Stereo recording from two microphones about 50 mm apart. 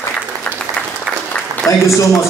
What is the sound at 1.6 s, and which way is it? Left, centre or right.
Speech, left.